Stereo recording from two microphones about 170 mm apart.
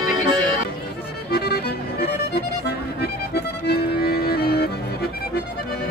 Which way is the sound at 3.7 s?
65° left (ahead or behind).